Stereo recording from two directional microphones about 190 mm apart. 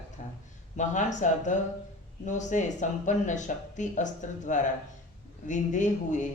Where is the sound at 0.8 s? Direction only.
40° left (ahead or behind).